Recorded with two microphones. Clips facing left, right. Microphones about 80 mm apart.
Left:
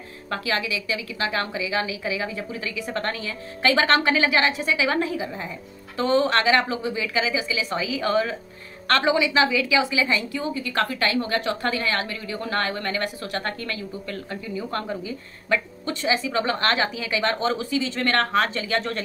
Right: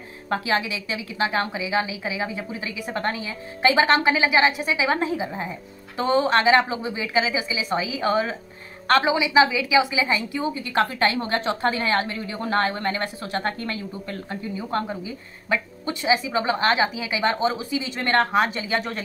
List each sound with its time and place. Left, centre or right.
0.3 s a woman's voice: right